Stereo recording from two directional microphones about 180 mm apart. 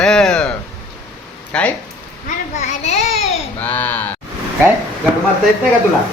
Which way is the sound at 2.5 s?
40° left (ahead or behind).